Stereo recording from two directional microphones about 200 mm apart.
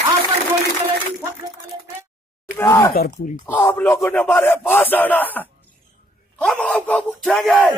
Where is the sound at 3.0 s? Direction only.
50° left (ahead or behind).